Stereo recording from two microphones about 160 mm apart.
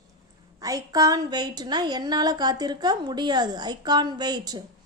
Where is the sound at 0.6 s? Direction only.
20° right (ahead or behind).